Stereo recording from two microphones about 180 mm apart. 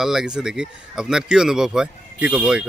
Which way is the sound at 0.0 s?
5° right (ahead or behind).